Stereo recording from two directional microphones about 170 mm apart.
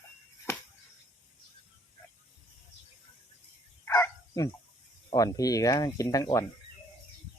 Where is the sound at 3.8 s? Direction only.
15° left (ahead or behind).